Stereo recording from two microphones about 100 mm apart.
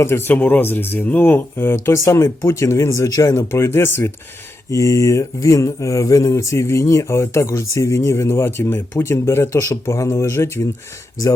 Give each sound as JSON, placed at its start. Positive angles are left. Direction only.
{"t": 0.0, "sound": "speech", "side_deg": 25}